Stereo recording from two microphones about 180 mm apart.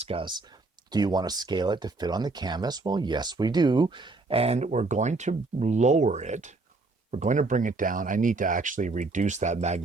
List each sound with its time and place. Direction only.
0.0 s speech: 30° right (ahead or behind)